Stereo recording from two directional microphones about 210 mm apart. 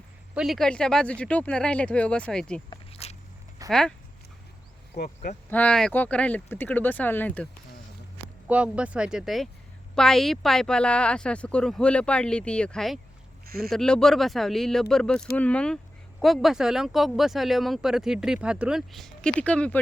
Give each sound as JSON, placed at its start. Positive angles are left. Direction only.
{"t": 0.3, "sound": "speech", "side_deg": 0}
{"t": 2.6, "sound": "walk", "side_deg": 30}
{"t": 3.7, "sound": "speech", "side_deg": 0}
{"t": 4.9, "sound": "speech", "side_deg": 50}
{"t": 5.5, "sound": "speech", "side_deg": 5}
{"t": 8.4, "sound": "speech", "side_deg": -5}